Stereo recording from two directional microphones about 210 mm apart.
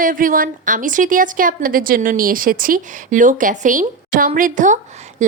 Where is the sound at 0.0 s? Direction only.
40° right (ahead or behind).